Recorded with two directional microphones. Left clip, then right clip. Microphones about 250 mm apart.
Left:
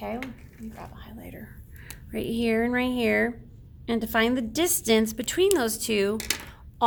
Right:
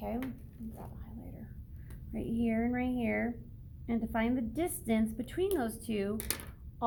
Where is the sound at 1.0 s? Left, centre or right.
Left.